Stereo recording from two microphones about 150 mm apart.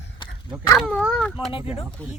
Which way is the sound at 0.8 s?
Centre (ahead or behind).